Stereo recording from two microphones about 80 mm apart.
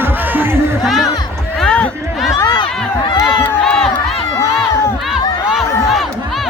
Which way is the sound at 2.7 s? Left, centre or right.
Centre.